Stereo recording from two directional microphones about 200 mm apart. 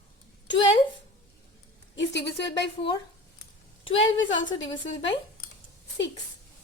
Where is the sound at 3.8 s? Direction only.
25° left (ahead or behind).